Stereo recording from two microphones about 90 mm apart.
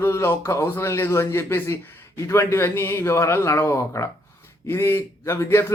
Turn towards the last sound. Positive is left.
turn(degrees=30)  # may be behind; listen again after turning